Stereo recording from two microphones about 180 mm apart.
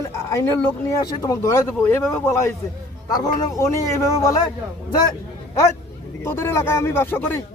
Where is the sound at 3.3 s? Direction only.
15° left (ahead or behind).